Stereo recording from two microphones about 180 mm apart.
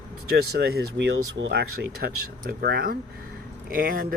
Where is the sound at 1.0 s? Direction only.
85° right.